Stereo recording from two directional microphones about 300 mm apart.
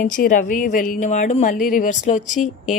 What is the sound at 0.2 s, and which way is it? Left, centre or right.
Speech, left.